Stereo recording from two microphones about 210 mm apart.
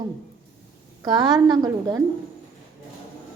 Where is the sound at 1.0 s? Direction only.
20° right (ahead or behind).